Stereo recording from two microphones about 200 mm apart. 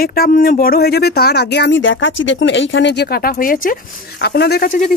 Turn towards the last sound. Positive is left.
turn(degrees=55)  # may be behind; listen again after turning